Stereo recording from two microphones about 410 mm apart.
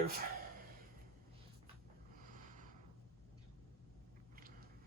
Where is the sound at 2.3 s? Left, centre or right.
Centre.